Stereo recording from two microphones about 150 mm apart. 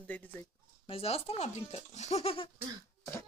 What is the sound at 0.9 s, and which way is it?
Speech, 40° left (ahead or behind).